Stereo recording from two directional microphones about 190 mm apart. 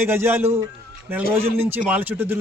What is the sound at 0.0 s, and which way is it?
Speech, 10° right (ahead or behind).